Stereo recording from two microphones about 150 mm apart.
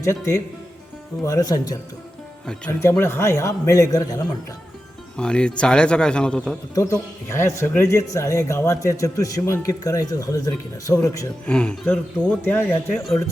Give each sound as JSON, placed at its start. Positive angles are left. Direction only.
{"t": 0.0, "sound": "speech", "side_deg": 20}
{"t": 2.5, "sound": "a man's voice", "side_deg": 15}
{"t": 5.1, "sound": "speech", "side_deg": 5}
{"t": 6.7, "sound": "speech", "side_deg": 20}
{"t": 11.4, "sound": "a man's voice", "side_deg": 5}